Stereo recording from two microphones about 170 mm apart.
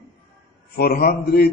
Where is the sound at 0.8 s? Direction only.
65° left (ahead or behind).